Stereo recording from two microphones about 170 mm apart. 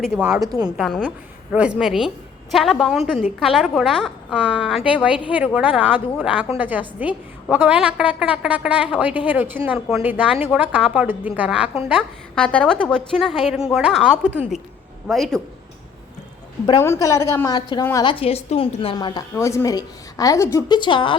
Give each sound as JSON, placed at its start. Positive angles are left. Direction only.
{"t": 0.0, "sound": "a woman's voice", "side_deg": -5}
{"t": 12.3, "sound": "a woman's voice", "side_deg": 5}
{"t": 16.6, "sound": "a woman's voice", "side_deg": 20}
{"t": 18.9, "sound": "a woman's voice", "side_deg": 25}